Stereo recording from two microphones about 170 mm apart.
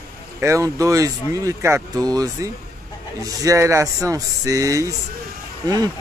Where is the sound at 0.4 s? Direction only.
20° right (ahead or behind).